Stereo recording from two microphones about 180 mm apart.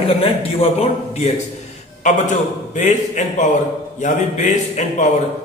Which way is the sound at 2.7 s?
40° left (ahead or behind).